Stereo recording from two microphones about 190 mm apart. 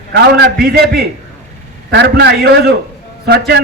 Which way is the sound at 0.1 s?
60° right (ahead or behind).